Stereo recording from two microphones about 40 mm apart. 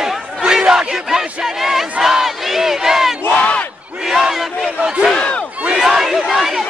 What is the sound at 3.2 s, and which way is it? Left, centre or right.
Battle cry, left.